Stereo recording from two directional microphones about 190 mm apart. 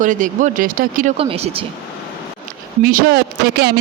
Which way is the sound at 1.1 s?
30° right (ahead or behind).